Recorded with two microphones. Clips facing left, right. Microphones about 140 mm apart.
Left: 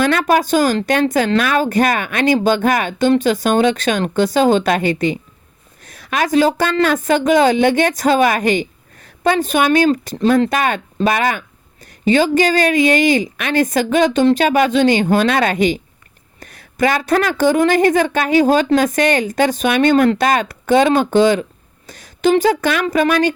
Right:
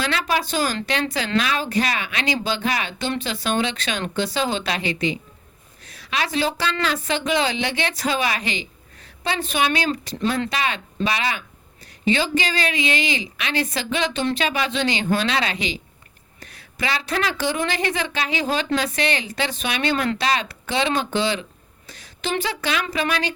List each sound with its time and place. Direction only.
0.0 s a woman's voice: 50° left (ahead or behind)